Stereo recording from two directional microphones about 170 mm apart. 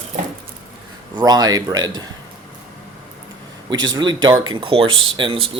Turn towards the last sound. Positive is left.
turn(degrees=-30)  # may be behind; listen again after turning